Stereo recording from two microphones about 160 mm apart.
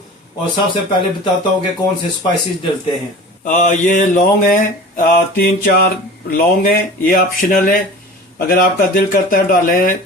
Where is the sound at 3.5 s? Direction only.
50° left (ahead or behind); by 5.8 s 75° left (ahead or behind).